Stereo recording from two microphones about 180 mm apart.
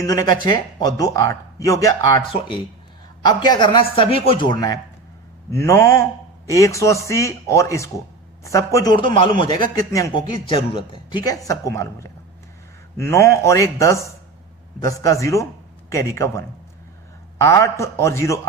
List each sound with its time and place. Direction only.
0.0 s speech: 20° left (ahead or behind)
3.2 s speech: 25° left (ahead or behind)
13.1 s speech: 15° left (ahead or behind)